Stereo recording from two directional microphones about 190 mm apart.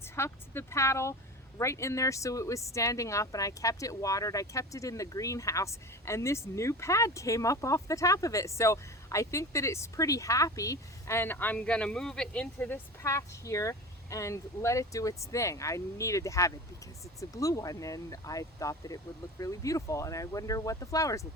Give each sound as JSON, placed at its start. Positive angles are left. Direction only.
{"t": 0.0, "sound": "speech", "side_deg": 15}